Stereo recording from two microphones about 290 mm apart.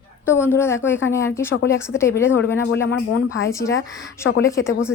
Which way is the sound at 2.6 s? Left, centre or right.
Left.